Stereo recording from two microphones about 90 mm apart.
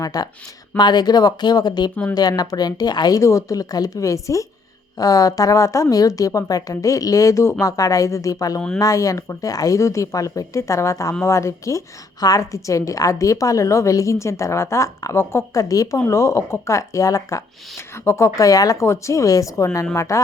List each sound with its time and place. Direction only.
0.0 s a woman's voice: 45° left (ahead or behind); by 15.6 s 30° left (ahead or behind)
15.7 s speech: 40° left (ahead or behind)